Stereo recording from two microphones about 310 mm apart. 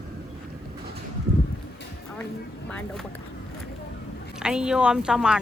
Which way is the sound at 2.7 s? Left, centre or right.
Centre.